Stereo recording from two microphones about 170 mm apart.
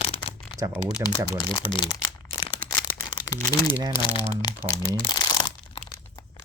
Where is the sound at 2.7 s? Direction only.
30° left (ahead or behind).